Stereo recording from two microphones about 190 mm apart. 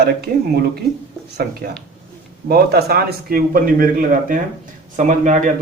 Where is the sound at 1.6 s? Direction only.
50° right (ahead or behind).